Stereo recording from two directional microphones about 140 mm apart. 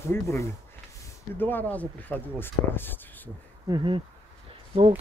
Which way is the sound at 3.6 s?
35° right (ahead or behind).